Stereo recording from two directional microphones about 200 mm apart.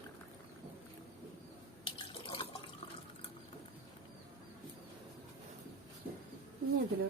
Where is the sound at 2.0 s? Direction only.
25° left (ahead or behind).